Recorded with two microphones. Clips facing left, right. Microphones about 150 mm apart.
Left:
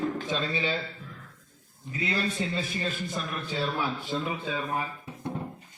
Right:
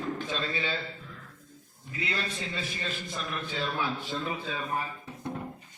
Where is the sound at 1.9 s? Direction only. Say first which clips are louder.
Left 4 dB; 35° left (ahead or behind).